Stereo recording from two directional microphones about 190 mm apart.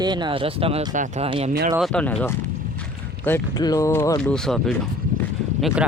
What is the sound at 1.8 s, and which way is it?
Speech, 5° left (ahead or behind).